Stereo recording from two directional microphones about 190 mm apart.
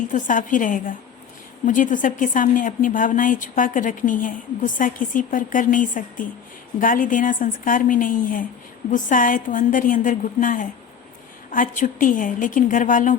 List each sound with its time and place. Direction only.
0.1 s a woman's voice: 45° left (ahead or behind)